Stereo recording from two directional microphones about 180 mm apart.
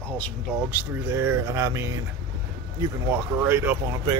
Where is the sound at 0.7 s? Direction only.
15° right (ahead or behind).